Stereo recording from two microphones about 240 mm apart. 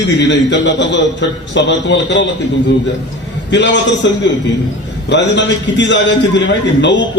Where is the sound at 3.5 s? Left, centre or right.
Left.